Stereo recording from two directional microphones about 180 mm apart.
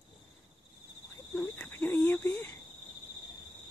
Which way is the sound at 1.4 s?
10° left (ahead or behind).